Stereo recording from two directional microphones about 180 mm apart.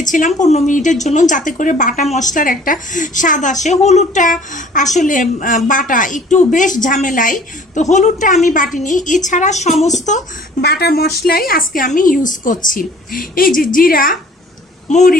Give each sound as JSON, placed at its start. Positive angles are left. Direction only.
{"t": 0.0, "sound": "a woman's voice", "side_deg": 45}
{"t": 10.6, "sound": "a woman's voice", "side_deg": 65}